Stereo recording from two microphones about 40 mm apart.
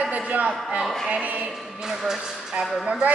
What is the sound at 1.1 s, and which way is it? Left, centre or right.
Speech, right.